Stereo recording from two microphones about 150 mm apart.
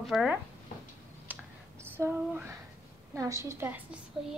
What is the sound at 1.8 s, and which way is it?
A woman's voice, 15° right (ahead or behind).